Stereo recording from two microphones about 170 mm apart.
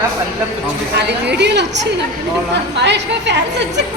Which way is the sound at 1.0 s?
80° right.